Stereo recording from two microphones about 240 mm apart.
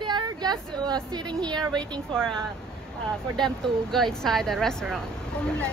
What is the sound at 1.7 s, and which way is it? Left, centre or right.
Speech, centre.